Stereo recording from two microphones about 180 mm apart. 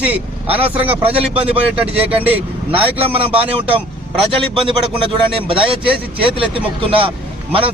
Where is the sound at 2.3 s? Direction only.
10° right (ahead or behind).